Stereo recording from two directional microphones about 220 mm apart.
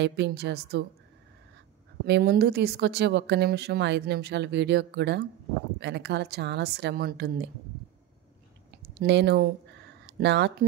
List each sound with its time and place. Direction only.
0.0 s speech: 50° right (ahead or behind)
2.0 s speech: 50° right (ahead or behind)
9.0 s speech: 50° right (ahead or behind)